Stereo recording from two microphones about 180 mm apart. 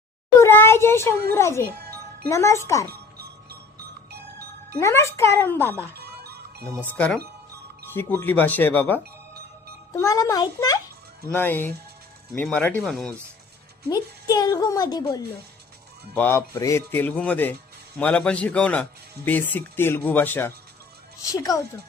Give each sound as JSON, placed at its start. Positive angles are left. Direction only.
{"t": 0.3, "sound": "speech", "side_deg": 15}
{"t": 1.7, "sound": "music", "side_deg": -60}
{"t": 2.2, "sound": "speech", "side_deg": 15}
{"t": 3.2, "sound": "music", "side_deg": -60}
{"t": 4.8, "sound": "speech", "side_deg": 15}
{"t": 6.0, "sound": "music", "side_deg": -60}
{"t": 6.9, "sound": "a woman's voice", "side_deg": 10}
{"t": 13.9, "sound": "a woman's voice", "side_deg": 20}
{"t": 16.1, "sound": "a woman's voice", "side_deg": 10}